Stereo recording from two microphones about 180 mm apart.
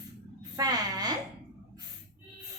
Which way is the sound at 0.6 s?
20° right (ahead or behind).